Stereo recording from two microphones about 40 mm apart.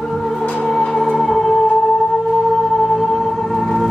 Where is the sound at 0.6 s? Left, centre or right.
Centre.